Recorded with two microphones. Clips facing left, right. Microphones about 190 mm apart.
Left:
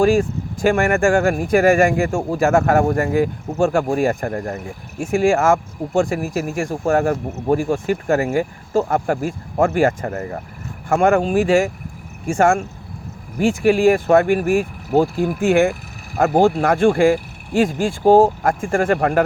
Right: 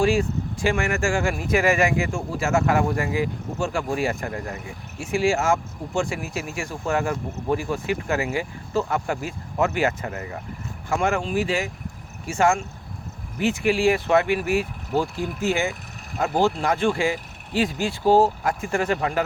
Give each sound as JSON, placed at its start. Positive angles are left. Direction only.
{"t": 0.0, "sound": "speech", "side_deg": 45}